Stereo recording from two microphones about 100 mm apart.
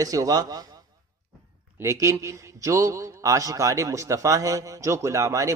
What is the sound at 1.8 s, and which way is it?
A man's voice, 30° right (ahead or behind).